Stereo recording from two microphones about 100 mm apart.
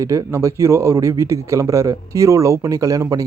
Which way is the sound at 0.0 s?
30° right (ahead or behind).